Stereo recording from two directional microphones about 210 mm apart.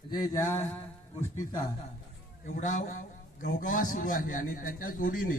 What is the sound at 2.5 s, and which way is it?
A man's voice, 35° left (ahead or behind).